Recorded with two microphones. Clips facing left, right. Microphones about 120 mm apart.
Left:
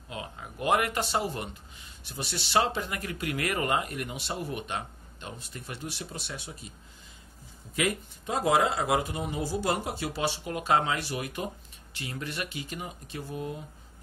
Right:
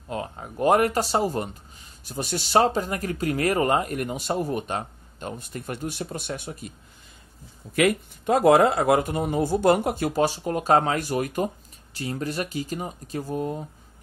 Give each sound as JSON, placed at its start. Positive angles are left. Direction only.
{"t": 0.1, "sound": "speech", "side_deg": -40}
{"t": 7.7, "sound": "speech", "side_deg": -60}